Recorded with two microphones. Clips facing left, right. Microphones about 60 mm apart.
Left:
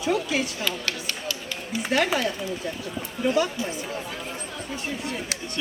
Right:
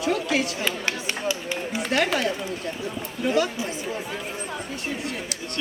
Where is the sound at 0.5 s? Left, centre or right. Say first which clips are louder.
Right 2 dB; right.